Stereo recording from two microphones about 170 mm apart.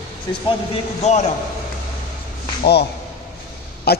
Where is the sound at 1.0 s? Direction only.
40° left (ahead or behind).